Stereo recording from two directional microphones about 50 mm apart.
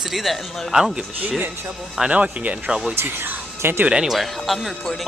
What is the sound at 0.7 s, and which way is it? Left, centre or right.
Speech, centre.